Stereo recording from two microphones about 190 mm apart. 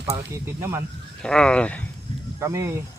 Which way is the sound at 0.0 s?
15° right (ahead or behind).